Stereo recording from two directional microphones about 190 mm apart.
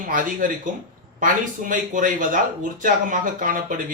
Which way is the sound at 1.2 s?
45° right (ahead or behind).